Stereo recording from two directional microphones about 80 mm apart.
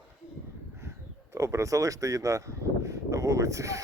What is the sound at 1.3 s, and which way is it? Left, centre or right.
Speech, right.